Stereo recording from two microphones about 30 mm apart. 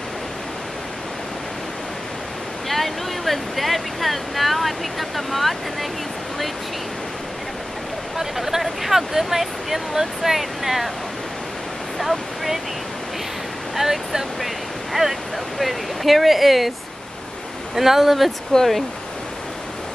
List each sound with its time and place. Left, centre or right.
2.7 s speech: centre
8.2 s speech: centre
12.0 s waves: centre
13.7 s speech: centre
17.7 s speech: centre
18.5 s speech: left